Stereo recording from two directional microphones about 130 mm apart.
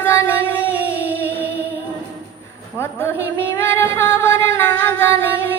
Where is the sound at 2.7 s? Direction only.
20° left (ahead or behind).